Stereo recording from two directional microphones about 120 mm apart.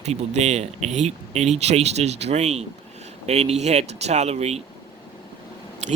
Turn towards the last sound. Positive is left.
turn(degrees=-70)  # may be behind; listen again after turning